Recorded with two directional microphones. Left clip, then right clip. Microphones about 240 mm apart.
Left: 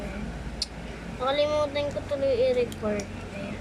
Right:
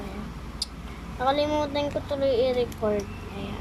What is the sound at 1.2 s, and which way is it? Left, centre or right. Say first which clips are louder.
Speech: even; right.